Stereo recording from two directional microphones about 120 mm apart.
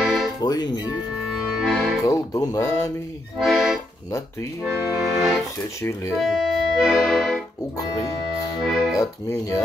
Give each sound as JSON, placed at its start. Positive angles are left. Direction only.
{"t": 0.0, "sound": "music", "side_deg": 0}
{"t": 0.4, "sound": "speech", "side_deg": 35}
{"t": 1.3, "sound": "music", "side_deg": -5}
{"t": 2.0, "sound": "speech", "side_deg": 30}
{"t": 3.3, "sound": "speech", "side_deg": 0}
{"t": 4.6, "sound": "accordion", "side_deg": -5}
{"t": 6.1, "sound": "music", "side_deg": -5}
{"t": 8.6, "sound": "speech", "side_deg": 0}